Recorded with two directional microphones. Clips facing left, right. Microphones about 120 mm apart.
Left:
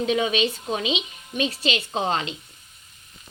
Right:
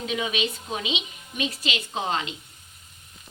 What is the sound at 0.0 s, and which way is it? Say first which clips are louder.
A woman's voice: left 6 dB; 35° left (ahead or behind).